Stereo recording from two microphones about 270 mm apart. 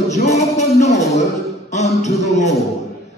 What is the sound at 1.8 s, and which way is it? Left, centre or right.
Speech, left.